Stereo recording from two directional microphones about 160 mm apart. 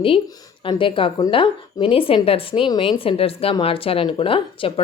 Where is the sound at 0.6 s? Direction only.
30° left (ahead or behind).